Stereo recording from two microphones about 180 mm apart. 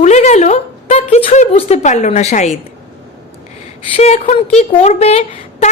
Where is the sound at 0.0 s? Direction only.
40° left (ahead or behind).